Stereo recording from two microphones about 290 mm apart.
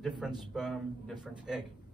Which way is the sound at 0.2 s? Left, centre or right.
Centre.